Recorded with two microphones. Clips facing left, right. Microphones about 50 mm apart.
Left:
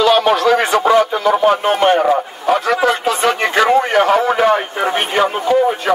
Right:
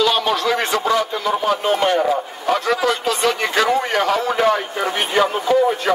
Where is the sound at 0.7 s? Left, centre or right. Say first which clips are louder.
Left 6 dB; left.